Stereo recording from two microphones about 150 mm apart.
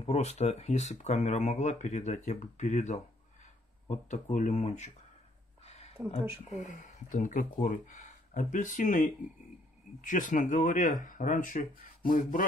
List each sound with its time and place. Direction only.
0.0 s speech: 45° left (ahead or behind)
6.0 s speech: 15° right (ahead or behind)
6.5 s speech: 55° left (ahead or behind)